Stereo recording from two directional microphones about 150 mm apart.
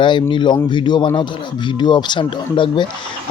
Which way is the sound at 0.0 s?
30° left (ahead or behind).